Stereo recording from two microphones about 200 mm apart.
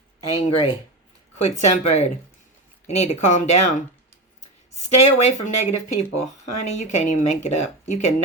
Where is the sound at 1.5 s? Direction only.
35° left (ahead or behind).